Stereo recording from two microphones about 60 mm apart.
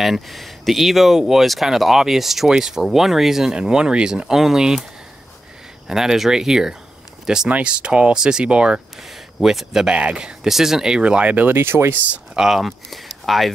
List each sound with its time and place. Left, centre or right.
0.0 s speech: centre
5.9 s speech: centre
7.4 s speech: centre
9.4 s speech: centre
9.8 s speech: centre
11.5 s speech: right
12.4 s speech: centre